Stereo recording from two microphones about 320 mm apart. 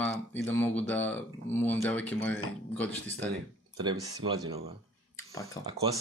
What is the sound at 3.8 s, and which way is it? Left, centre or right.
Speech, centre.